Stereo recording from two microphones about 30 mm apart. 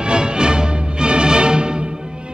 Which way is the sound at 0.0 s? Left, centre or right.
Right.